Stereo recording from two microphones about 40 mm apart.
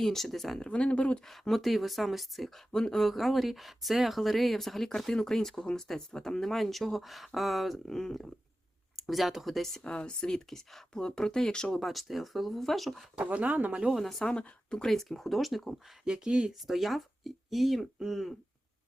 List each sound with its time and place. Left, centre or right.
0.0 s speech: centre
0.6 s speech: left
1.3 s speech: centre
2.7 s speech: centre
7.9 s speech: centre
9.0 s speech: centre
9.8 s speech: left
11.8 s speech: centre
13.1 s speech: right
13.9 s speech: centre
14.3 s speech: left
14.8 s speech: centre
16.0 s speech: centre
16.5 s speech: centre